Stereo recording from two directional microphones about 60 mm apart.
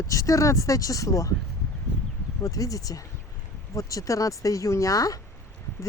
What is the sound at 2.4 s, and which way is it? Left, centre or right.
Speech, left.